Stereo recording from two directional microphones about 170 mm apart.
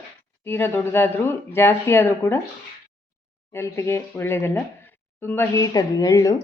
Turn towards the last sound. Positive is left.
turn(degrees=20)  # may be behind; listen again after turning